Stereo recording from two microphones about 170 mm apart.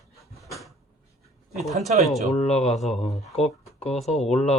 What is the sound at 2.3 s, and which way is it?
Speech, 40° left (ahead or behind).